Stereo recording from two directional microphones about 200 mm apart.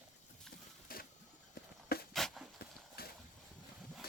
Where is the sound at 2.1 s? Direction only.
Centre (ahead or behind).